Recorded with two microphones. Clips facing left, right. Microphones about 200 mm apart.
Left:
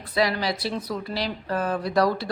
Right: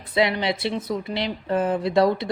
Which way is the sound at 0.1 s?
25° right (ahead or behind).